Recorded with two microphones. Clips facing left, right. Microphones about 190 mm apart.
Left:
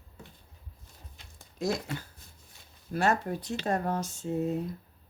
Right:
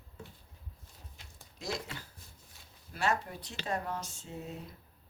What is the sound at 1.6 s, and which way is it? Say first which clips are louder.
Speech: left 8 dB; 50° left (ahead or behind).